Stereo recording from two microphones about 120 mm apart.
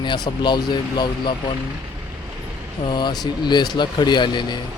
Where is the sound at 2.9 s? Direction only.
40° left (ahead or behind).